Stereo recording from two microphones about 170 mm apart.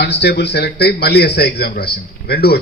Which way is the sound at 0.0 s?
80° left.